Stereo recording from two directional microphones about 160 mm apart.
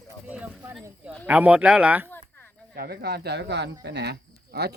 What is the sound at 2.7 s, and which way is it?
Speech, 80° right.